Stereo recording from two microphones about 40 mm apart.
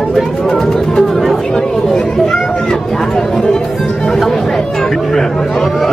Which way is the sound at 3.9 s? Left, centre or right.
Centre.